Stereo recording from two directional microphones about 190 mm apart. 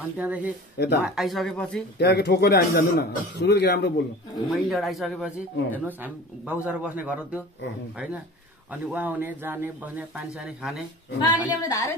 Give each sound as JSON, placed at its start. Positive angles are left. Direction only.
{"t": 0.2, "sound": "speech", "side_deg": -10}
{"t": 0.7, "sound": "a man's voice", "side_deg": 60}
{"t": 1.0, "sound": "speech", "side_deg": 0}
{"t": 2.0, "sound": "a man's voice", "side_deg": 60}
{"t": 4.5, "sound": "speech", "side_deg": 0}
{"t": 8.9, "sound": "speech", "side_deg": -10}
{"t": 11.1, "sound": "speech", "side_deg": 20}